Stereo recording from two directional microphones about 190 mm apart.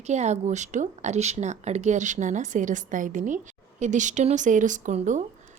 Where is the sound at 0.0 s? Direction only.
35° right (ahead or behind).